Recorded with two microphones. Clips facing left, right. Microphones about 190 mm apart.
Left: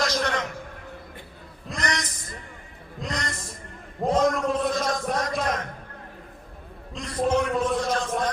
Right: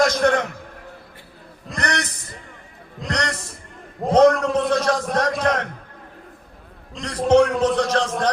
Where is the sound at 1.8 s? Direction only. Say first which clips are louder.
Right 4 dB; 65° right (ahead or behind).